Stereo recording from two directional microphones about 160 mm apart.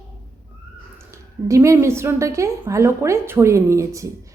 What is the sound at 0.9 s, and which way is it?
A woman's voice, 20° right (ahead or behind).